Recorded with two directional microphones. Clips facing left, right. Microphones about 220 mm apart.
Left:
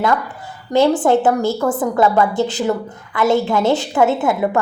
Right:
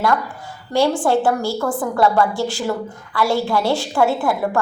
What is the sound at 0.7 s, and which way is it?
A woman's voice, 20° left (ahead or behind).